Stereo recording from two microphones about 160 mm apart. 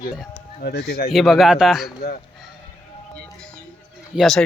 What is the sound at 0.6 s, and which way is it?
Speech, 90° left.